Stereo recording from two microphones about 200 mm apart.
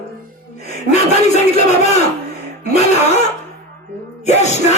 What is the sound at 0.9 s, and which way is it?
Speech, 35° left (ahead or behind).